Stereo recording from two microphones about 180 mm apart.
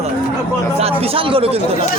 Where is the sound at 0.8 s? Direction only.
30° right (ahead or behind).